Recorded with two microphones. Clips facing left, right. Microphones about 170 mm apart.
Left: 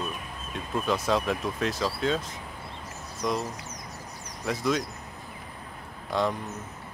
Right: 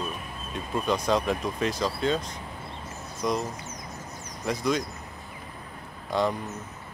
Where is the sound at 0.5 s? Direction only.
Centre (ahead or behind).